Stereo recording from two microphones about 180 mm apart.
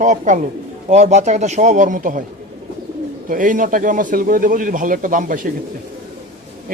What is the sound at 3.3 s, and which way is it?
Speech, 45° right (ahead or behind).